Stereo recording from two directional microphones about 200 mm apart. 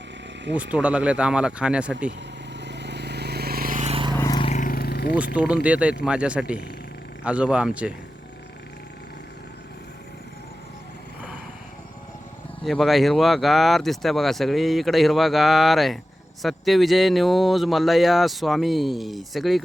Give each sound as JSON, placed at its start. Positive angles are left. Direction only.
{"t": 0.5, "sound": "speech", "side_deg": -5}
{"t": 2.0, "sound": "vehicle", "side_deg": -60}
{"t": 4.2, "sound": "a sound", "side_deg": 20}
{"t": 4.5, "sound": "roar", "side_deg": 45}
{"t": 5.1, "sound": "speech", "side_deg": -5}
{"t": 12.6, "sound": "speech", "side_deg": 0}